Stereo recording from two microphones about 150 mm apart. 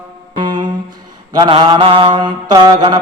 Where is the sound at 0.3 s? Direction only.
30° right (ahead or behind).